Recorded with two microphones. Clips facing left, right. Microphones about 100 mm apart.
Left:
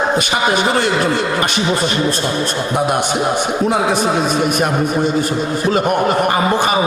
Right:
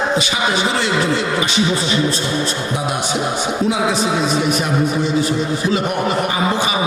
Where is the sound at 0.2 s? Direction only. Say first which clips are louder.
Left 3 dB; 55° left (ahead or behind).